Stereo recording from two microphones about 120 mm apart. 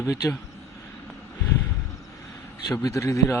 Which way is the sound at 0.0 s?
25° left (ahead or behind).